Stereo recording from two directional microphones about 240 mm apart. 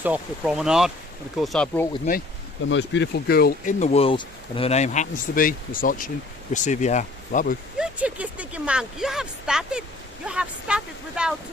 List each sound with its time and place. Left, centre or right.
0.0 s speech: centre
2.6 s speech: left
7.8 s speech: centre